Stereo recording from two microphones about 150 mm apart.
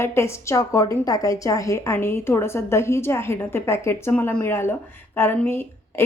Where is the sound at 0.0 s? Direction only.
20° left (ahead or behind).